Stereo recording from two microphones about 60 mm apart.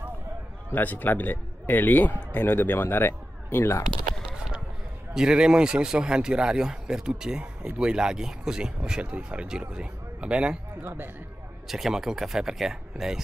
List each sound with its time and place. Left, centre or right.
0.7 s a man's voice: left
5.1 s a man's voice: centre
11.6 s a man's voice: centre